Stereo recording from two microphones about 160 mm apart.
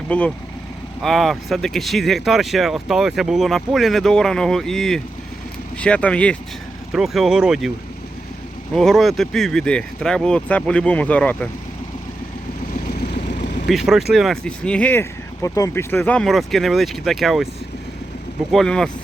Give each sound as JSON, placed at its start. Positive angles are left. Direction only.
{"t": 0.1, "sound": "speech", "side_deg": 10}
{"t": 8.7, "sound": "speech", "side_deg": 0}
{"t": 12.7, "sound": "vehicle", "side_deg": 80}
{"t": 13.7, "sound": "speech", "side_deg": 0}
{"t": 18.5, "sound": "speech", "side_deg": 5}